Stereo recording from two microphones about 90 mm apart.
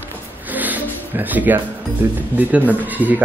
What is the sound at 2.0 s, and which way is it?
Speech, 25° right (ahead or behind).